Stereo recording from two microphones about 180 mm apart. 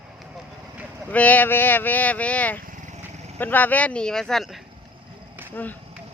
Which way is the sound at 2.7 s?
45° right (ahead or behind).